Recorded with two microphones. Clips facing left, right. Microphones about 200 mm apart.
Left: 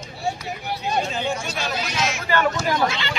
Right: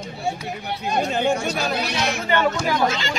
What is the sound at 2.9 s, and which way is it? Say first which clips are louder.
Chatter: right 3 dB; 45° right (ahead or behind).